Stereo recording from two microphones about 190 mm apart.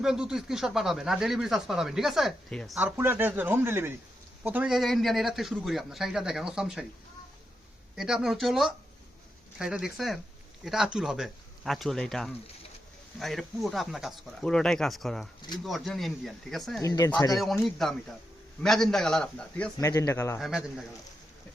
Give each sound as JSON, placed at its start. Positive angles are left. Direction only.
{"t": 0.0, "sound": "speech", "side_deg": -5}
{"t": 2.7, "sound": "speech", "side_deg": -10}
{"t": 7.9, "sound": "speech", "side_deg": -5}
{"t": 16.8, "sound": "speech", "side_deg": 20}
{"t": 17.6, "sound": "speech", "side_deg": 0}
{"t": 19.8, "sound": "speech", "side_deg": 20}
{"t": 20.4, "sound": "speech", "side_deg": 0}